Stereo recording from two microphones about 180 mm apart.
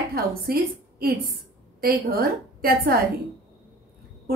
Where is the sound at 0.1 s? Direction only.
55° right (ahead or behind).